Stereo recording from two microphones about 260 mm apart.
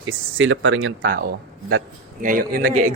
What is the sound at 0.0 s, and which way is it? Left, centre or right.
Speech, right.